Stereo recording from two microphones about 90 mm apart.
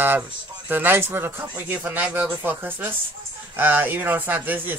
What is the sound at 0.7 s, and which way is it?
Speech, 20° right (ahead or behind).